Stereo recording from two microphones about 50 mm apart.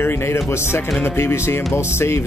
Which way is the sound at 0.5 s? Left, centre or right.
Left.